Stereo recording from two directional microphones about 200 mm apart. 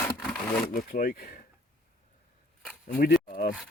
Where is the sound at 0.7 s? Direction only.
45° left (ahead or behind).